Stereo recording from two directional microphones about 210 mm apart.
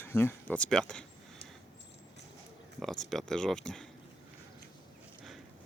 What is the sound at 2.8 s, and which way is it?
Speech, centre (ahead or behind).